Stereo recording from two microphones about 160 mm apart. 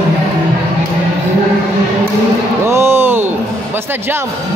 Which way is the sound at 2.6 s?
15° right (ahead or behind).